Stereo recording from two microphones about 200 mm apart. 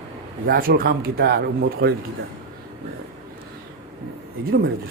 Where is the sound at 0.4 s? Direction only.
50° right (ahead or behind).